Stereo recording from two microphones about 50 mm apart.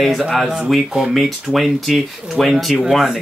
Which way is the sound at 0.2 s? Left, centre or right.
Centre.